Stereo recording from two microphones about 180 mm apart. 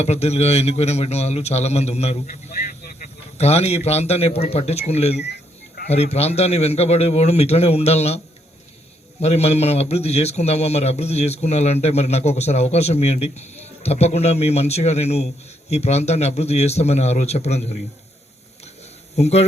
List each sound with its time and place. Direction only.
0.0 s speech: 35° left (ahead or behind)
2.2 s speech: 50° left (ahead or behind)
3.3 s speech: 35° left (ahead or behind)
5.2 s a sound: 70° left (ahead or behind)
5.9 s speech: 35° left (ahead or behind)
9.2 s speech: 35° left (ahead or behind)
19.1 s speech: 35° left (ahead or behind)